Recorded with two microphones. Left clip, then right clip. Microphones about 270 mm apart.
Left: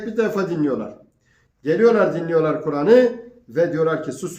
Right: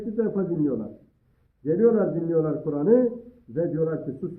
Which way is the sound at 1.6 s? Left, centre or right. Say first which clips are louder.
Left 5 dB; left.